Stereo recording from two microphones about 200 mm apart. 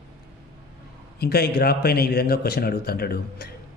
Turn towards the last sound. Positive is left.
turn(degrees=50)  # may be behind; listen again after turning